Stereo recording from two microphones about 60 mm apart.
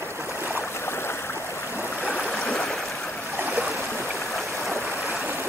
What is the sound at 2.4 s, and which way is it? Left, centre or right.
Stream, centre.